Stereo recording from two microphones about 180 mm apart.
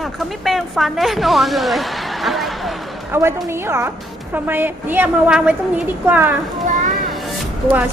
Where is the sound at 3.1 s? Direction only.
15° right (ahead or behind).